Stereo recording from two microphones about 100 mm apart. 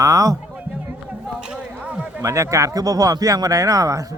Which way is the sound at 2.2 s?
30° right (ahead or behind).